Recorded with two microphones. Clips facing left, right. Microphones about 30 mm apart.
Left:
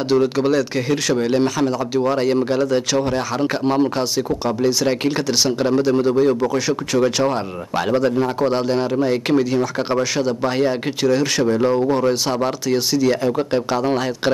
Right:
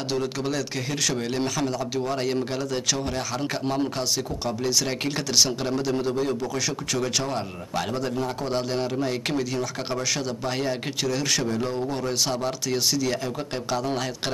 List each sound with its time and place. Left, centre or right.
0.1 s speech: centre
7.2 s a man's voice: left
11.4 s a man's voice: left
12.4 s speech: centre